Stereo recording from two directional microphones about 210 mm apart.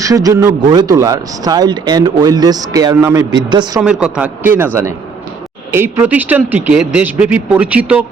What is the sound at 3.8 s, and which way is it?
Speech, 5° right (ahead or behind).